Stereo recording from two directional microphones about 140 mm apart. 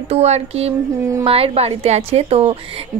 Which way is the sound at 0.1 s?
50° right (ahead or behind).